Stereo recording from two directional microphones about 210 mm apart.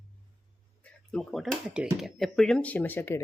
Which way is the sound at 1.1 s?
Centre (ahead or behind).